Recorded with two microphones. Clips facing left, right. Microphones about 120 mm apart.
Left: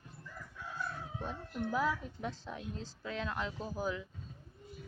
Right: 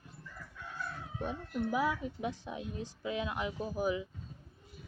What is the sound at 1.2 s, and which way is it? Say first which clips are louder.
A woman's voice: right 4 dB; 15° right (ahead or behind).